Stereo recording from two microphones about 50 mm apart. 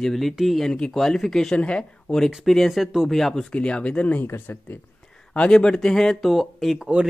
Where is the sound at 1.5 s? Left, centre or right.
Left.